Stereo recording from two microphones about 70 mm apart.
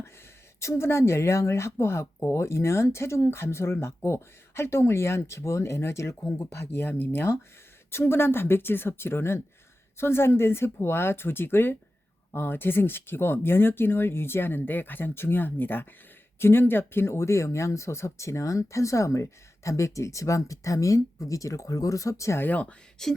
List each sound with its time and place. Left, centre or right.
0.6 s speech: left
22.4 s speech: left
23.0 s a sound: centre